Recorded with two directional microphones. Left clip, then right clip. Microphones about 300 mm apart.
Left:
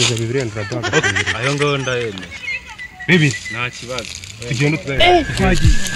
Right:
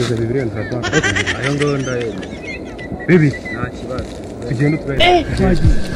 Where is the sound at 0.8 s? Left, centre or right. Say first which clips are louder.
Even; centre.